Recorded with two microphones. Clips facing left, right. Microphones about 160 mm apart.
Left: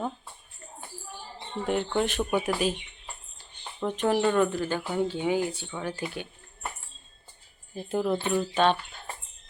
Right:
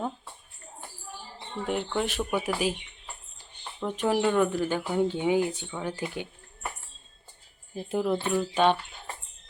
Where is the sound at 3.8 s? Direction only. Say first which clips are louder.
Left 1 dB; 10° right (ahead or behind).